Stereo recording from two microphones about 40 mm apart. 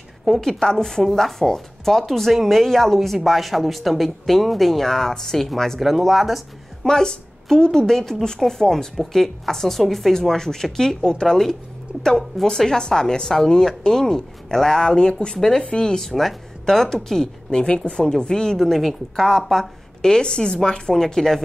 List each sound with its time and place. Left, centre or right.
0.4 s a woman's voice: centre
1.0 s speech: centre
5.8 s speech: centre
6.9 s a woman's voice: centre
15.3 s a woman's voice: centre
18.6 s a woman's voice: centre